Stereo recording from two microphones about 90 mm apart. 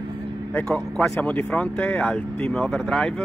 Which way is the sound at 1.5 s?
15° left (ahead or behind).